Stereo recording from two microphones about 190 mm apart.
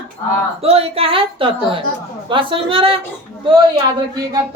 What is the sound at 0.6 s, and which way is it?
A woman's voice, 30° right (ahead or behind).